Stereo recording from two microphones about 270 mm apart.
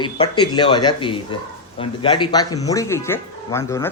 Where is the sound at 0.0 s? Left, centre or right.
Centre.